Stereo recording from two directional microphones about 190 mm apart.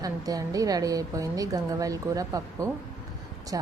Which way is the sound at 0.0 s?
20° right (ahead or behind).